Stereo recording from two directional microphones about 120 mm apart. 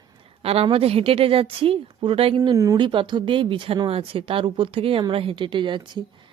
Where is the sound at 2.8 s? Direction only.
40° right (ahead or behind).